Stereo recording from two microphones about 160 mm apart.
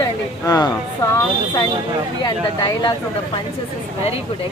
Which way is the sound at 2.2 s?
25° left (ahead or behind).